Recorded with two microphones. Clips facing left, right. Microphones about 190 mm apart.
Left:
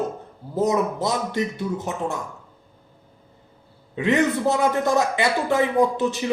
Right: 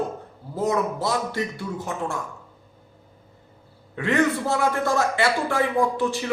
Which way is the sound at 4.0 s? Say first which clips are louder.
Left 2 dB; 20° left (ahead or behind).